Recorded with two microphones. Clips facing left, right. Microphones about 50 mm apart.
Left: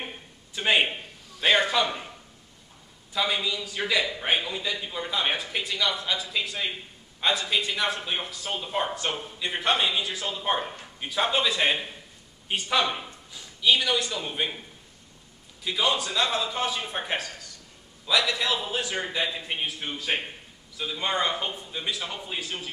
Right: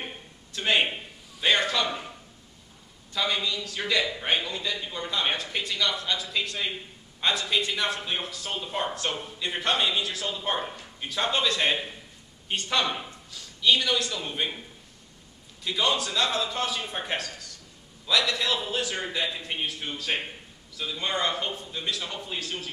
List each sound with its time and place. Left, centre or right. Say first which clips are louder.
0.0 s a sound: even; centre
1.4 s a man's voice: left 2 dB; centre
3.1 s a man's voice: left 1 dB; centre
13.3 s a sound: even; centre
13.7 s a man's voice: even; centre
15.6 s a man's voice: even; centre